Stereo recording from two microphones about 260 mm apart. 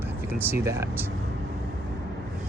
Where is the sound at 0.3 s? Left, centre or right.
Centre.